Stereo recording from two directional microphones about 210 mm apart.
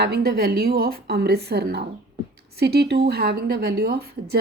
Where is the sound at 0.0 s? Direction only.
50° right (ahead or behind).